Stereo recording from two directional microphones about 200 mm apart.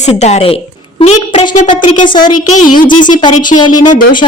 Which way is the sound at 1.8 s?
40° left (ahead or behind).